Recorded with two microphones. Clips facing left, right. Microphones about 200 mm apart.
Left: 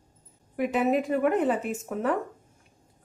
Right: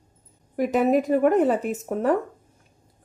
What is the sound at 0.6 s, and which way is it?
Speech, 40° right (ahead or behind).